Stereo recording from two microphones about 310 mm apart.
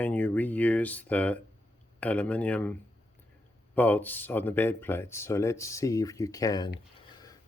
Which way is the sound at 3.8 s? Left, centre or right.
Centre.